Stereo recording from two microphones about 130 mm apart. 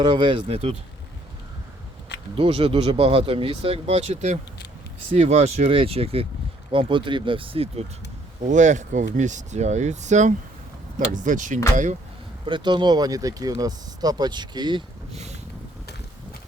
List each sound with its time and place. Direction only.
0.1 s speech: 40° right (ahead or behind)
0.4 s speech: 50° right (ahead or behind)
2.3 s speech: 45° right (ahead or behind)
8.4 s speech: 70° right (ahead or behind)
11.1 s speech: 75° right (ahead or behind)
12.5 s speech: 35° right (ahead or behind)
15.1 s a sound: 60° right (ahead or behind)